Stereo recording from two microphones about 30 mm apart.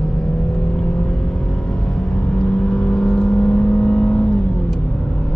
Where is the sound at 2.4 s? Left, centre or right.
Left.